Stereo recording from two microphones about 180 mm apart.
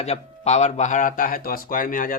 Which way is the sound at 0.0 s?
40° left (ahead or behind).